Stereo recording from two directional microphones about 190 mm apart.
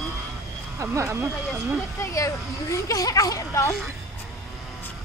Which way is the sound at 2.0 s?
15° left (ahead or behind).